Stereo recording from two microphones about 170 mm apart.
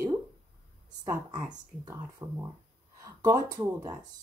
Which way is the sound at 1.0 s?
15° right (ahead or behind).